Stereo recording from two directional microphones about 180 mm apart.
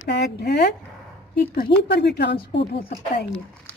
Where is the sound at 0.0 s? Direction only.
65° left (ahead or behind).